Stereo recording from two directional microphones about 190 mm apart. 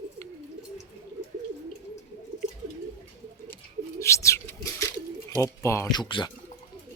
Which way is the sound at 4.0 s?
15° left (ahead or behind).